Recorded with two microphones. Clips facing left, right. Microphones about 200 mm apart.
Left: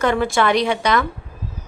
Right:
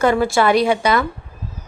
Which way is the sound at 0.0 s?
5° right (ahead or behind).